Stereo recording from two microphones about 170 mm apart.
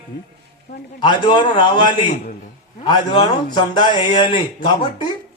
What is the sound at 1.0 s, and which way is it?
Speech, 25° left (ahead or behind).